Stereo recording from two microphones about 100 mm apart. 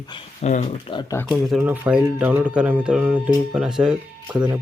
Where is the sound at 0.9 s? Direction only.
75° left (ahead or behind).